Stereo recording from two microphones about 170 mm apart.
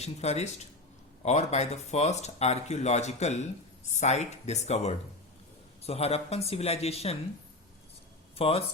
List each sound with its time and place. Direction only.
0.0 s speech: 40° left (ahead or behind)
8.4 s speech: 35° left (ahead or behind)